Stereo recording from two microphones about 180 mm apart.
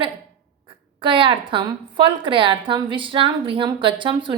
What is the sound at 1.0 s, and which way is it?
A woman's voice, 30° right (ahead or behind).